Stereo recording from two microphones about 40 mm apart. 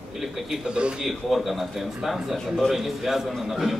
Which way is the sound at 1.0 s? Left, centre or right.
Centre.